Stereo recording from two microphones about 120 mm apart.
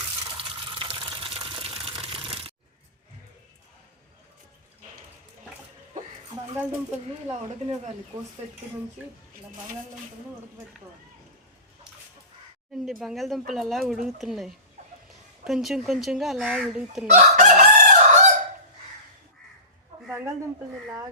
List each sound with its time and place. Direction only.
0.3 s water: 45° right (ahead or behind)
12.8 s speech: centre (ahead or behind)
14.8 s a sound: 70° right (ahead or behind)
15.4 s speech: 5° right (ahead or behind)
17.2 s chicken: 90° right
20.1 s a sound: 20° right (ahead or behind)